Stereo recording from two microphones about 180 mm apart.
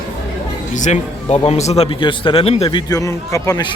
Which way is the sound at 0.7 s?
40° left (ahead or behind).